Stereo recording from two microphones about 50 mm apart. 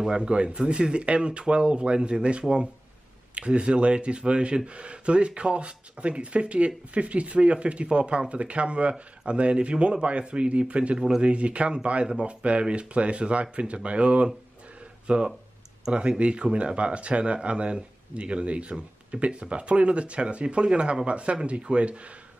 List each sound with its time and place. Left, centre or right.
0.2 s speech: right
14.8 s a sound: right
15.8 s speech: centre